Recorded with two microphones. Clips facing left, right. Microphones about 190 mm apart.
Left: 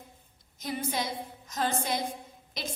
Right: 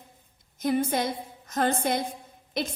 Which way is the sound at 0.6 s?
50° right (ahead or behind).